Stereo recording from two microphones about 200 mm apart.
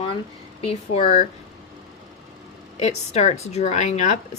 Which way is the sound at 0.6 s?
35° left (ahead or behind).